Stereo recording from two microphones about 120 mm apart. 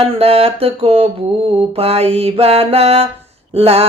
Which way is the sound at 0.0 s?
55° right (ahead or behind).